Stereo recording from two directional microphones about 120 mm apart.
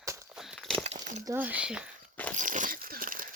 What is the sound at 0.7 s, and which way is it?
Crumpling, 60° right (ahead or behind).